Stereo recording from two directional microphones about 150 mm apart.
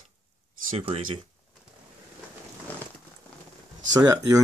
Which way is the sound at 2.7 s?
10° left (ahead or behind).